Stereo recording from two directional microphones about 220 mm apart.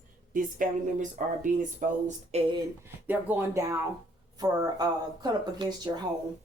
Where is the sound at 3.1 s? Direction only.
10° right (ahead or behind).